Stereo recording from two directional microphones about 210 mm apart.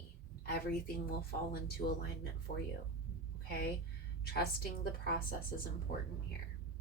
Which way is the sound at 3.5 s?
45° left (ahead or behind).